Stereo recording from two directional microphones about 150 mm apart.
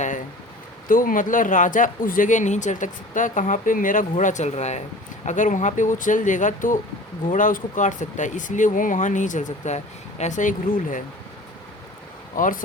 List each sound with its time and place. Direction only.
0.9 s speech: 65° left (ahead or behind)
12.4 s speech: 65° left (ahead or behind)